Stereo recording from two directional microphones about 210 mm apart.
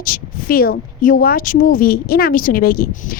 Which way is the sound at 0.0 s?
45° left (ahead or behind).